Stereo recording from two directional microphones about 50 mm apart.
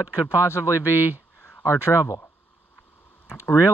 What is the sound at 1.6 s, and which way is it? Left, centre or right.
Speech, left.